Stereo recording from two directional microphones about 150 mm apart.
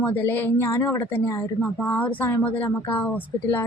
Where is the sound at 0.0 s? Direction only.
10° left (ahead or behind).